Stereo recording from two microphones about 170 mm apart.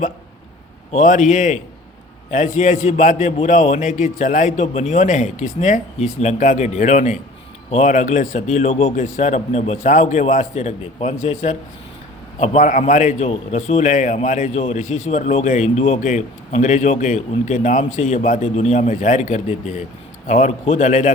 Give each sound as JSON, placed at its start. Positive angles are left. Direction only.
{"t": 0.9, "sound": "a man's voice", "side_deg": 45}